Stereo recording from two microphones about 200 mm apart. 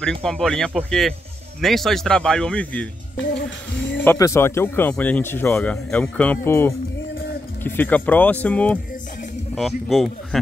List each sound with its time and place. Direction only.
0.2 s speech: 5° left (ahead or behind)
3.2 s music: 65° left (ahead or behind)
4.0 s speech: 10° left (ahead or behind)